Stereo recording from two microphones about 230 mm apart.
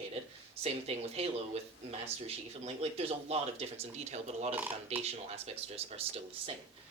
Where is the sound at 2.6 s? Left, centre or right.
Right.